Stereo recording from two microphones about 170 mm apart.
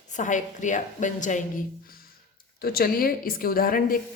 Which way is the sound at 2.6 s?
65° left (ahead or behind).